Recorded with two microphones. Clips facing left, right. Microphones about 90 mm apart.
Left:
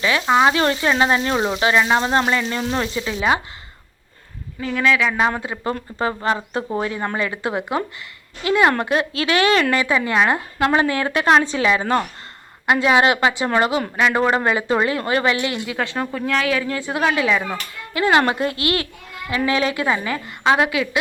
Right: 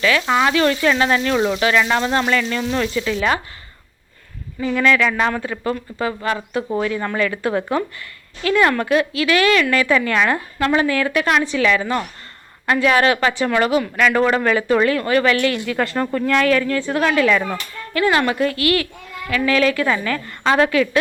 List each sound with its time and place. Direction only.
0.0 s speech: 25° left (ahead or behind)
4.6 s a woman's voice: centre (ahead or behind)
5.3 s speech: 25° left (ahead or behind)
9.8 s speech: 20° left (ahead or behind)
12.6 s speech: 20° left (ahead or behind)
15.8 s speech: centre (ahead or behind)
16.6 s a woman's voice: 20° left (ahead or behind)
18.2 s a woman's voice: 30° left (ahead or behind); by 21.0 s 10° left (ahead or behind)